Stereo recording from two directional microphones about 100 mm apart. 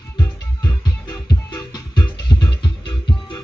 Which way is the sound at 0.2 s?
40° left (ahead or behind).